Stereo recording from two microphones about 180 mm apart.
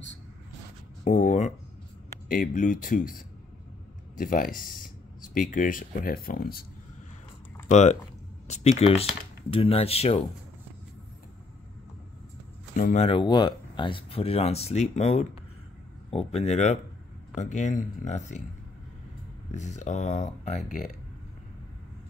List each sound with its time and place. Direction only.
1.0 s speech: 45° left (ahead or behind)
7.7 s speech: 40° left (ahead or behind)
12.7 s speech: 50° left (ahead or behind)
13.0 s speech: 25° left (ahead or behind)
19.5 s speech: 40° left (ahead or behind)